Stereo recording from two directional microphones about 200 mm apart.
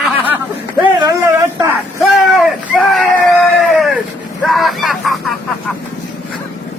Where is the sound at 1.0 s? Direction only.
15° right (ahead or behind).